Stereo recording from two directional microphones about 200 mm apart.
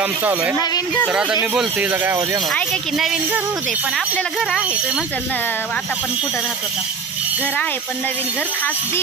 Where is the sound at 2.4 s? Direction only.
Centre (ahead or behind).